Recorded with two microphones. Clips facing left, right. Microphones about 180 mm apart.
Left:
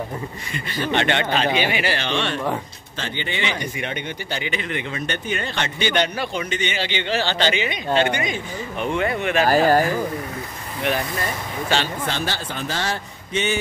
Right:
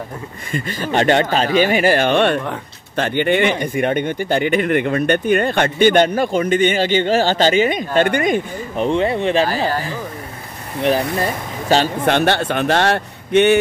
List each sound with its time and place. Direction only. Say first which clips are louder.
0.5 s speech: right 3 dB; 45° right (ahead or behind)
8.7 s speech: right 6 dB; 30° right (ahead or behind)
9.5 s speech: left 4 dB; 45° left (ahead or behind)
10.8 s speech: right 7 dB; 35° right (ahead or behind)
12.0 s a man's voice: right 10 dB; 60° right (ahead or behind)